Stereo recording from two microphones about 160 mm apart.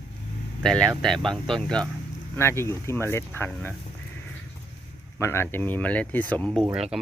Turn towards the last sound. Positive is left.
turn(degrees=-5)  # may be behind; listen again after turning